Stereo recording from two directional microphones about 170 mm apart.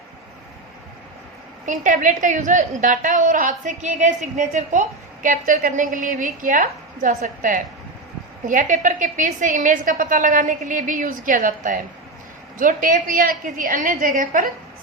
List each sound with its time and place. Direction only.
1.6 s a woman's voice: 50° right (ahead or behind)